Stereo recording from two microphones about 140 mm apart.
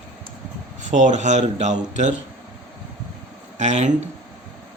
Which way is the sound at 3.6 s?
60° right (ahead or behind).